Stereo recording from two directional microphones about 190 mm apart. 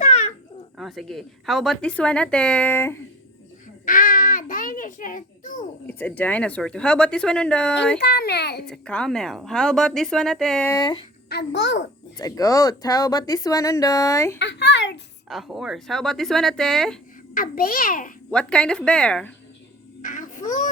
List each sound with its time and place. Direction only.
0.0 s babbling: 35° left (ahead or behind)
0.8 s a woman's voice: centre (ahead or behind)
3.8 s a sound: 45° left (ahead or behind)
5.8 s a woman's voice: 10° left (ahead or behind)
7.9 s a child's voice: 60° left (ahead or behind)
8.6 s a woman's voice: 5° left (ahead or behind)
10.7 s speech: 20° left (ahead or behind)
11.3 s a child's voice: 65° left (ahead or behind)
12.1 s speech: 20° left (ahead or behind)
14.3 s a child's voice: 65° left (ahead or behind)
15.3 s a woman's voice: centre (ahead or behind)
17.3 s a child's voice: 50° left (ahead or behind)
18.3 s a woman's voice: 5° left (ahead or behind)
20.0 s music: 45° left (ahead or behind)